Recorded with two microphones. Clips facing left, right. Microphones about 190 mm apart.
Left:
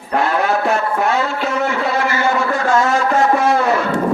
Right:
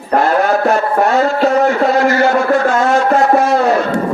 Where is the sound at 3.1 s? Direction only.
40° right (ahead or behind).